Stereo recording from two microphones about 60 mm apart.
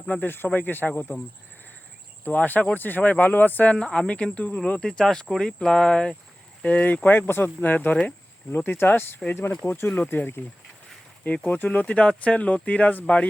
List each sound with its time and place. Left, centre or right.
0.0 s speech: left
2.2 s speech: left
3.8 s speech: centre; by 10.0 s left
10.0 s speech: left
11.4 s speech: left